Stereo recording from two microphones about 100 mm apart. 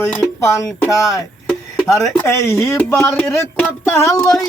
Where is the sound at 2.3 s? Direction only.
25° left (ahead or behind).